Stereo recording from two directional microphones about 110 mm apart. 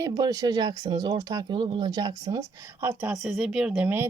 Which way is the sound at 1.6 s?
45° right (ahead or behind).